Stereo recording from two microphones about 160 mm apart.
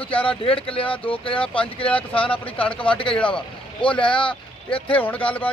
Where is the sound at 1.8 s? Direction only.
35° left (ahead or behind).